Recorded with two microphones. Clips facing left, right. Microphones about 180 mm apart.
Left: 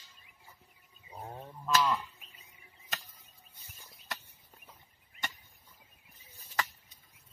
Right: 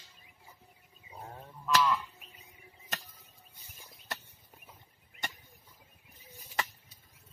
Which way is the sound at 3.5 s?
15° right (ahead or behind).